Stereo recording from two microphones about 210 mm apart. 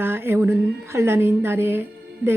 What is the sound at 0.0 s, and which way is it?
Speech, 10° right (ahead or behind).